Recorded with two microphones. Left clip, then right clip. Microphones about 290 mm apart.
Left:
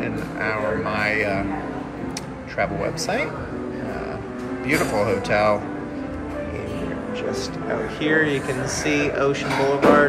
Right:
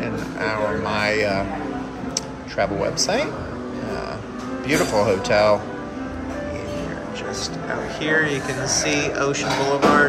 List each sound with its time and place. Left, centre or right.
0.0 s speech: centre
2.5 s a man's voice: centre
4.6 s speech: centre
8.0 s speech: centre